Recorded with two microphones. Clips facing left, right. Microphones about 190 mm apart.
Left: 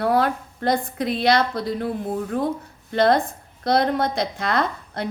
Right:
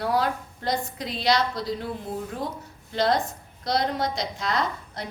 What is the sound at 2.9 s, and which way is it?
A woman's voice, 55° left (ahead or behind).